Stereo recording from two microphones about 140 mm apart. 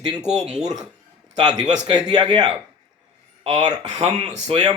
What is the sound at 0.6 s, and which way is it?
Speech, 25° right (ahead or behind).